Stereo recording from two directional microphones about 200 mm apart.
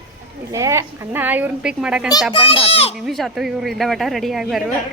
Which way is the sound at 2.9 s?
Centre (ahead or behind).